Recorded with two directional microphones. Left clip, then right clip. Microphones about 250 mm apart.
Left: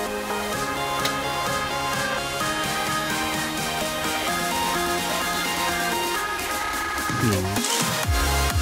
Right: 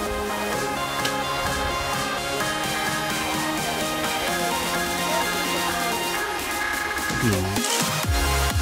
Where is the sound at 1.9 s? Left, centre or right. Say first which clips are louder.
Even; centre.